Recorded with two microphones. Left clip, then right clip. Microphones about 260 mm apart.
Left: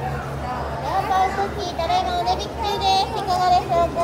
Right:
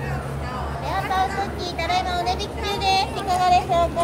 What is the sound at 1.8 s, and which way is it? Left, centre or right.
Vehicle, centre.